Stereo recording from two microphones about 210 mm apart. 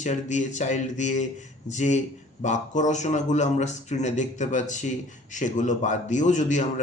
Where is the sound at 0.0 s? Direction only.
35° left (ahead or behind).